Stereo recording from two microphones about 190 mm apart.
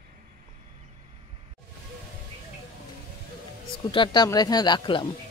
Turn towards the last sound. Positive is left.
turn(degrees=25)  # may be behind; listen again after turning